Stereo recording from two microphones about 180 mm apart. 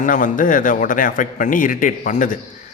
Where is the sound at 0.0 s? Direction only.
45° left (ahead or behind).